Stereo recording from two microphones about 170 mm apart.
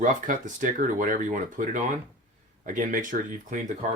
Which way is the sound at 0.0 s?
50° right (ahead or behind).